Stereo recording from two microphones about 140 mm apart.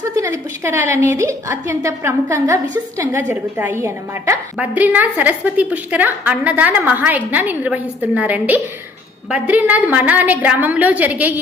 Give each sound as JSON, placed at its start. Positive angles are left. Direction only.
{"t": 0.0, "sound": "a woman's voice", "side_deg": -20}